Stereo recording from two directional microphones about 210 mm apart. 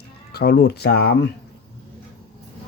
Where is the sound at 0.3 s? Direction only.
50° left (ahead or behind).